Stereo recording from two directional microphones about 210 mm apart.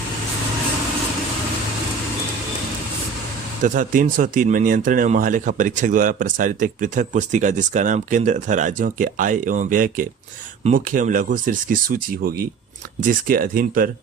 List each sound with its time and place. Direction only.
3.6 s speech: 40° right (ahead or behind)